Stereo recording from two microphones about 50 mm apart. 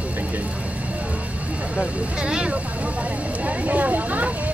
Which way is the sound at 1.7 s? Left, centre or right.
Centre.